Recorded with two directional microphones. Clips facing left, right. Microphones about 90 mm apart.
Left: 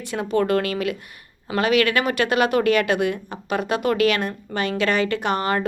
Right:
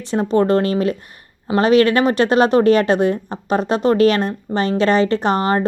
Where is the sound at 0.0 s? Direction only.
30° right (ahead or behind).